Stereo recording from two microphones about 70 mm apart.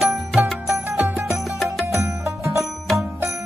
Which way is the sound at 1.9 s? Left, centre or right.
Right.